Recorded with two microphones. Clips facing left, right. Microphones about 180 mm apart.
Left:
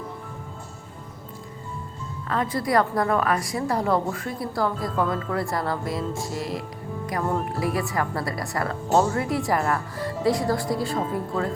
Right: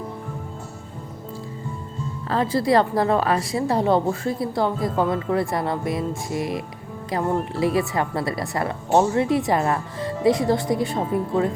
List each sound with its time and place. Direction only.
2.3 s a woman's voice: 30° right (ahead or behind)